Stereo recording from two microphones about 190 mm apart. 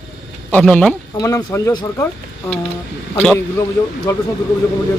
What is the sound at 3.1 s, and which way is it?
Speech, 10° left (ahead or behind).